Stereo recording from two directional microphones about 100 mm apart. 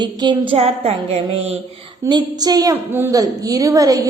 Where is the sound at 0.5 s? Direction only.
80° right.